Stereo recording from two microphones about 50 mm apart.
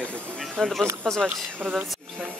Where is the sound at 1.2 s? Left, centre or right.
Right.